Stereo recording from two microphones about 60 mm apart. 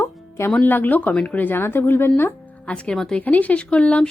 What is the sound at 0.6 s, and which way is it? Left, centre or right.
Speech, left.